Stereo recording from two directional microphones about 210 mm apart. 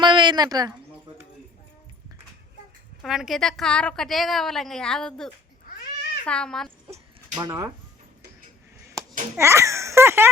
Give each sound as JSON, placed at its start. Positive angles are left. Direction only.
{"t": 0.0, "sound": "a sound", "side_deg": -20}
{"t": 3.0, "sound": "a woman's voice", "side_deg": 0}
{"t": 7.3, "sound": "speech", "side_deg": -15}
{"t": 9.4, "sound": "speech", "side_deg": -15}